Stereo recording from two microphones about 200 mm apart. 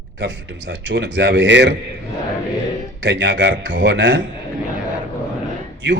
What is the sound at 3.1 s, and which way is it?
A man's voice, 65° right (ahead or behind).